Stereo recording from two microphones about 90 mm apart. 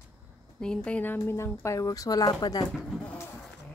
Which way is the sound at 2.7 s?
5° left (ahead or behind).